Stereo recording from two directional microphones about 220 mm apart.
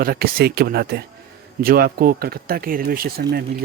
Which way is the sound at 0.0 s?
45° right (ahead or behind).